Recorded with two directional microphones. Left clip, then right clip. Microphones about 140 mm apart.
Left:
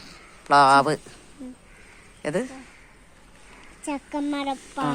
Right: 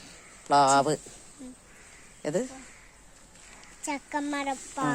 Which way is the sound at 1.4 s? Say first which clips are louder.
Left 6 dB; 10° left (ahead or behind).